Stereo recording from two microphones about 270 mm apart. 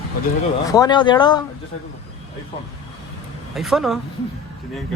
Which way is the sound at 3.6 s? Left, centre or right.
Centre.